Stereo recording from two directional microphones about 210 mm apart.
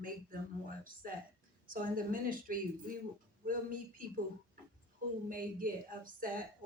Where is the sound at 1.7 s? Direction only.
40° right (ahead or behind).